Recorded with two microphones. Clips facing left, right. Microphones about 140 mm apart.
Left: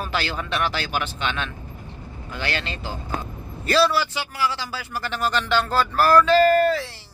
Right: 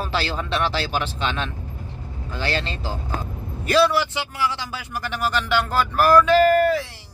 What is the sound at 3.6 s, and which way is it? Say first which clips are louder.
A man's voice: right 1 dB; 15° right (ahead or behind).